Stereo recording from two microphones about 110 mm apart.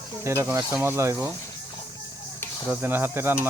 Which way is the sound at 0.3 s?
25° right (ahead or behind).